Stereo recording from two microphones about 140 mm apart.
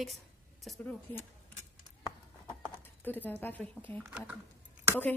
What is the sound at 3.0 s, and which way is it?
Speech, 15° left (ahead or behind).